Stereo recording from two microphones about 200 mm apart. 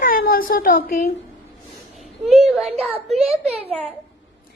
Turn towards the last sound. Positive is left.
turn(degrees=-30)  # may be behind; listen again after turning